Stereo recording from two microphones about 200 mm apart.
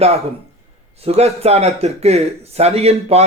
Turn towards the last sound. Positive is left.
turn(degrees=-30)  # may be behind; listen again after turning